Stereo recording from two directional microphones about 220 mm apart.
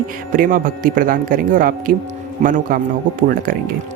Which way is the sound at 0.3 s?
40° right (ahead or behind).